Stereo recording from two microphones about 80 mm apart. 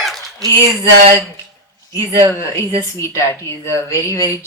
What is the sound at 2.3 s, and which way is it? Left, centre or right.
Speech, left.